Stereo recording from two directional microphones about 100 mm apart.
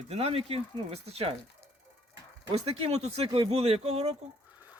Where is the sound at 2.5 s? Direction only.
90° right.